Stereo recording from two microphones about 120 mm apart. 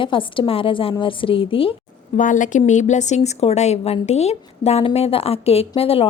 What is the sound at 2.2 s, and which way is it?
A woman's voice, 90° left.